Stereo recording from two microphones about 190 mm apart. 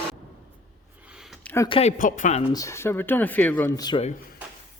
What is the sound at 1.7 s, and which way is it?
Speech, 35° left (ahead or behind).